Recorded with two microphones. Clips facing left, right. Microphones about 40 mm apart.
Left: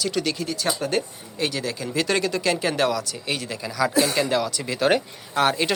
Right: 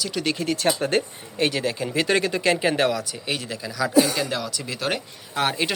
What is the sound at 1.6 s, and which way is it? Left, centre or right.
Speech, right.